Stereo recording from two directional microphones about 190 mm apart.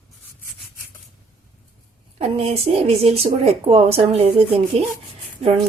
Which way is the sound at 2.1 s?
30° right (ahead or behind).